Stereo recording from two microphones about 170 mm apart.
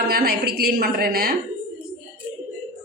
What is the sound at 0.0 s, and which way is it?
A woman's voice, 65° right (ahead or behind).